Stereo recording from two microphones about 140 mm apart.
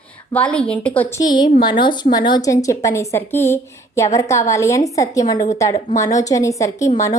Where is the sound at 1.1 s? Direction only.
30° left (ahead or behind).